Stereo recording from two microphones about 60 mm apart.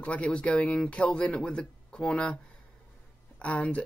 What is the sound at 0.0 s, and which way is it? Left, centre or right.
Speech, left.